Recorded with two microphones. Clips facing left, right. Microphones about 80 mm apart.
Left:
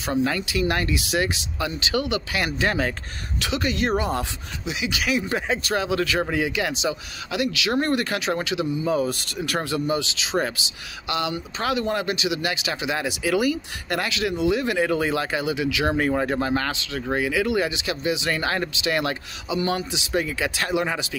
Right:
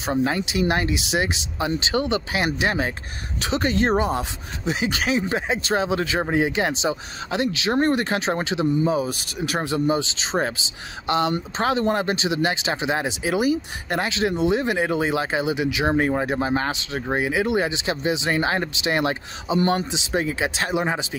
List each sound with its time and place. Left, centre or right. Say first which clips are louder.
0.0 s speech: right 1 dB; right
3.3 s speech: right 3 dB; right
4.6 s speech: right 3 dB; right
8.9 s speech: left 1 dB; centre